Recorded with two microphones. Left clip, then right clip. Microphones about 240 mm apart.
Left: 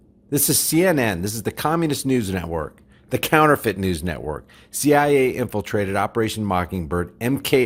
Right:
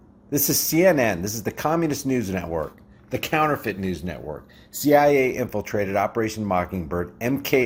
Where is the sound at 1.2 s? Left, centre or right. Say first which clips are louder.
Left 1 dB; left.